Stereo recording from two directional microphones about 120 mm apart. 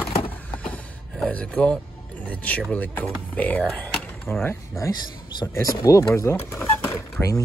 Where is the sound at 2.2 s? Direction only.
10° left (ahead or behind).